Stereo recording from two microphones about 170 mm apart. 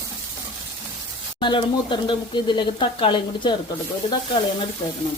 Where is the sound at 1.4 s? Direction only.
30° left (ahead or behind).